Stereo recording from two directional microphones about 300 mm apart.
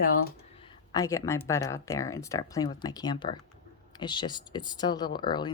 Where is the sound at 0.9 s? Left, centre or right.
Centre.